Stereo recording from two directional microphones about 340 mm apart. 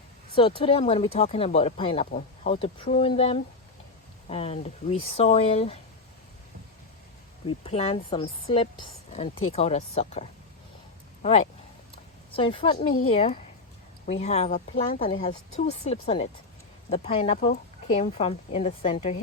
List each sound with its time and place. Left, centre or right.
0.3 s speech: centre
7.6 s a woman's voice: centre